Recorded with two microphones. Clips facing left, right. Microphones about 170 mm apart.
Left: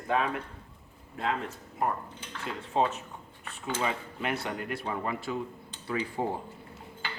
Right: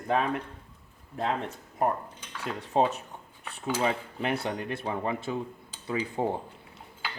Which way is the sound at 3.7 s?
35° right (ahead or behind).